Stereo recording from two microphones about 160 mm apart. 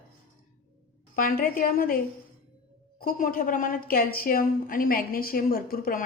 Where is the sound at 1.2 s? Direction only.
65° left (ahead or behind).